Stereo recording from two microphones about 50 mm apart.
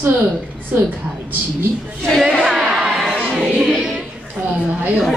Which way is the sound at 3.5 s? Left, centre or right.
Centre.